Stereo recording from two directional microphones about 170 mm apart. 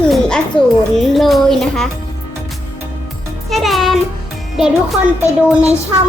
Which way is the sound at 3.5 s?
Centre (ahead or behind).